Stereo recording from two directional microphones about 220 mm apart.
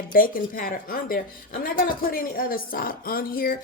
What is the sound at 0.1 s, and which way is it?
A woman's voice, 40° left (ahead or behind).